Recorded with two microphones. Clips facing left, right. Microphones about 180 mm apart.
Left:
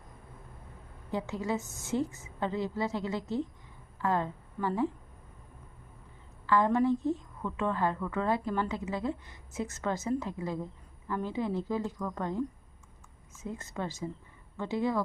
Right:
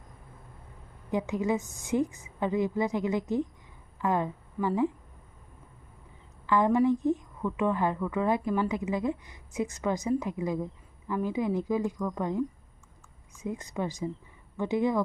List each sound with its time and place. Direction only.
1.1 s a woman's voice: 15° right (ahead or behind)
6.5 s speech: 15° right (ahead or behind)